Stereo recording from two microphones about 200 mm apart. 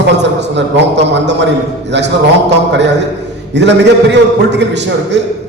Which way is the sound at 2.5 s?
60° right (ahead or behind).